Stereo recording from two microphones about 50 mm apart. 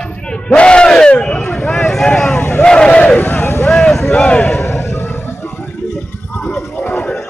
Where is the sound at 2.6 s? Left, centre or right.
Centre.